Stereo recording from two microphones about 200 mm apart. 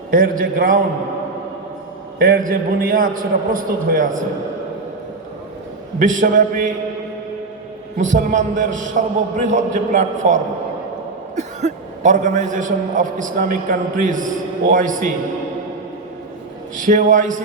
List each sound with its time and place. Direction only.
0.1 s a man's voice: 45° right (ahead or behind)
2.1 s a man's voice: 45° right (ahead or behind)
6.0 s a man's voice: 40° right (ahead or behind)
7.9 s a man's voice: 40° right (ahead or behind)
16.7 s a man's voice: 40° right (ahead or behind)